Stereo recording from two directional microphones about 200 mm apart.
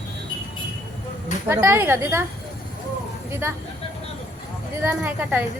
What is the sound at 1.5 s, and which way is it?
Speech, 10° right (ahead or behind).